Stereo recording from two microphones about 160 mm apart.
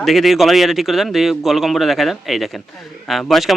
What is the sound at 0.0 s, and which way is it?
A man's voice, centre (ahead or behind).